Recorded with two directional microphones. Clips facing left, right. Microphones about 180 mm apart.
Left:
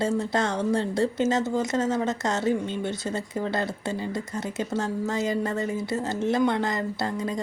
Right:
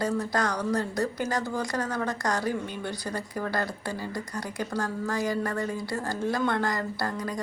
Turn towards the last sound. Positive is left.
turn(degrees=25)  # may be behind; listen again after turning